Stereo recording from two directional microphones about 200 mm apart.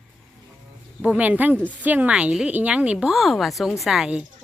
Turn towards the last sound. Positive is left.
turn(degrees=-5)  # may be behind; listen again after turning